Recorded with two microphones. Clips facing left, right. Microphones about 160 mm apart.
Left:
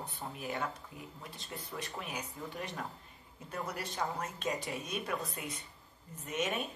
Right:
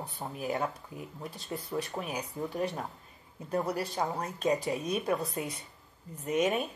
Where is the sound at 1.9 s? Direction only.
35° right (ahead or behind).